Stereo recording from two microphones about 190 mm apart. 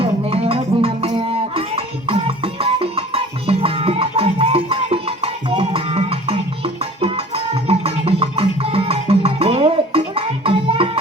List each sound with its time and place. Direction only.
0.0 s music: 30° right (ahead or behind)